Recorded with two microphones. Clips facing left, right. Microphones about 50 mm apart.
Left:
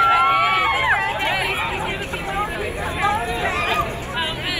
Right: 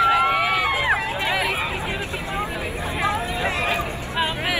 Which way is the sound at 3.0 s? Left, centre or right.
Left.